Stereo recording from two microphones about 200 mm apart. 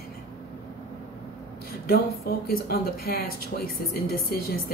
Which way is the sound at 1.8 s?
50° left (ahead or behind).